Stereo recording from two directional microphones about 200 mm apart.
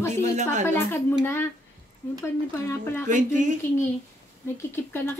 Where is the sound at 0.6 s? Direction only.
10° left (ahead or behind).